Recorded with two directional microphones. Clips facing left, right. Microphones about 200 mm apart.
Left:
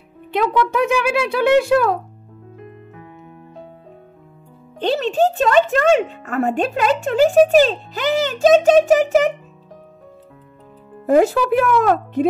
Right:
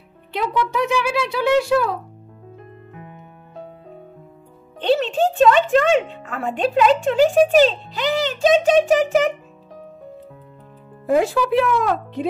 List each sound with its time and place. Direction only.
0.3 s speech: 55° left (ahead or behind)
4.7 s speech: 40° left (ahead or behind)
11.1 s speech: 45° left (ahead or behind)